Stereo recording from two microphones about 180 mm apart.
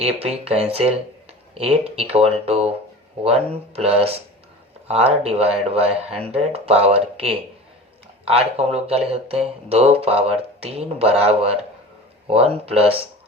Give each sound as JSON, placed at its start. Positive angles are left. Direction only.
{"t": 0.0, "sound": "speech", "side_deg": -35}